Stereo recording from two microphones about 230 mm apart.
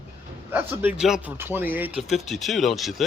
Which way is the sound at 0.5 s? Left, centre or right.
Centre.